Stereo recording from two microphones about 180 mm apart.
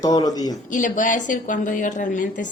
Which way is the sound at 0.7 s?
45° left (ahead or behind).